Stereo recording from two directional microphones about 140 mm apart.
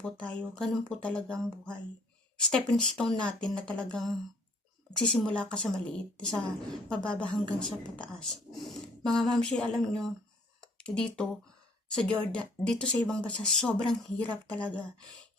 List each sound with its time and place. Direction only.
0.0 s speech: 10° left (ahead or behind)
10.6 s a sound: 5° left (ahead or behind)
11.9 s a woman's voice: 5° left (ahead or behind)